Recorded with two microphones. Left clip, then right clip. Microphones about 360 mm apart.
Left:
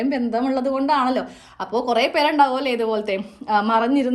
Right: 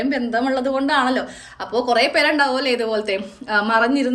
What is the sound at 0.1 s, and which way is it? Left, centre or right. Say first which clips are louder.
A woman's voice: right 2 dB; centre.